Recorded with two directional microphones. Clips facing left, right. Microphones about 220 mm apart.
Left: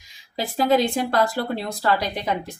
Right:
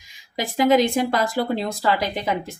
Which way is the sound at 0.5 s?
20° right (ahead or behind).